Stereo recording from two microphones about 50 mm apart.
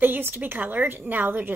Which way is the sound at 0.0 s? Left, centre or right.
Right.